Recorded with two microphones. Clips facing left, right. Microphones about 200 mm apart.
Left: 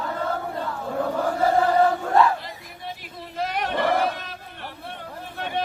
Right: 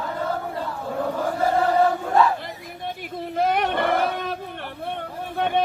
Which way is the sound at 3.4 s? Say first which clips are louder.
Right 3 dB; 55° right (ahead or behind).